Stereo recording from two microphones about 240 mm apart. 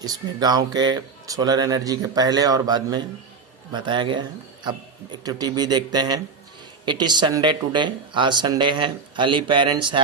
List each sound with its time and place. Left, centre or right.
0.0 s speech: centre